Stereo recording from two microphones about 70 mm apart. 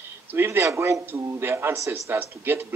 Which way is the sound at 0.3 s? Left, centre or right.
Right.